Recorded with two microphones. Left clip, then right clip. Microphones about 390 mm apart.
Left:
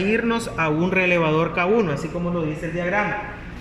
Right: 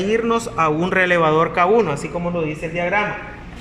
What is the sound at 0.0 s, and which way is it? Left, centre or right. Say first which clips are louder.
A man's voice: right 3 dB; centre.